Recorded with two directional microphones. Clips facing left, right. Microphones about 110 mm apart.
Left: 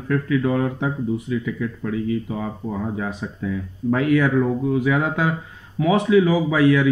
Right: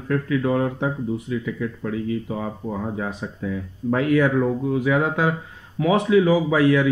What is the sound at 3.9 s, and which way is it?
Speech, 30° right (ahead or behind).